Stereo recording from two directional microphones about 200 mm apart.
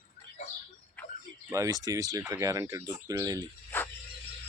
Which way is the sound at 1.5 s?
15° right (ahead or behind).